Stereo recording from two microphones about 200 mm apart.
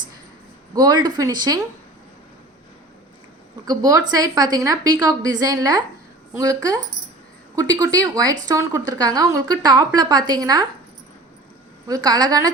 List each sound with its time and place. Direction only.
0.7 s a woman's voice: 20° right (ahead or behind)
3.7 s a woman's voice: 20° right (ahead or behind)
11.9 s a woman's voice: 20° right (ahead or behind)